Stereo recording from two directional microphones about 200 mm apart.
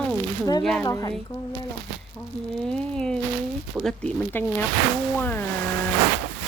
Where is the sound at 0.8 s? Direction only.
20° left (ahead or behind).